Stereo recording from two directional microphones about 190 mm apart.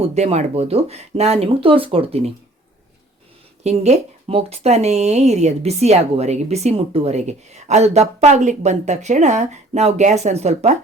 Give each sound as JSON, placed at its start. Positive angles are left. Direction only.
{"t": 0.0, "sound": "speech", "side_deg": -35}
{"t": 3.6, "sound": "speech", "side_deg": -35}